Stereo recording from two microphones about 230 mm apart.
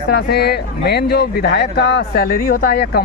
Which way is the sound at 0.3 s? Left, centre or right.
Left.